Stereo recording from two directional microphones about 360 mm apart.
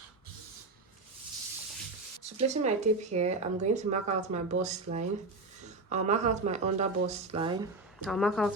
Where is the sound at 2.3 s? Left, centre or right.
Centre.